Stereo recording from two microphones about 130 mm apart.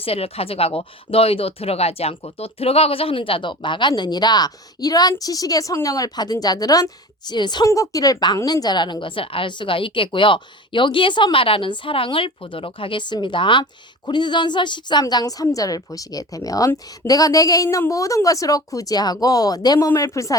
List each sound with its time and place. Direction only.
0.0 s a woman's voice: 50° left (ahead or behind); by 20.3 s 25° left (ahead or behind)